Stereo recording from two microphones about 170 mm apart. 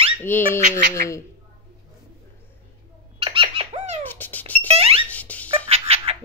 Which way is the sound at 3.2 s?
30° right (ahead or behind).